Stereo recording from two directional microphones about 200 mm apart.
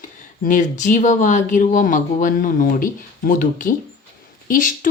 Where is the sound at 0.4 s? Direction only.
40° left (ahead or behind).